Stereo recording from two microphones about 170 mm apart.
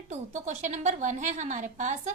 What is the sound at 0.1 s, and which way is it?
A woman's voice, 45° right (ahead or behind).